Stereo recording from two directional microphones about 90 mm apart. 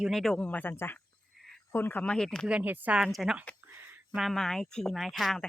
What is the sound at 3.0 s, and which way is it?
Speech, centre (ahead or behind).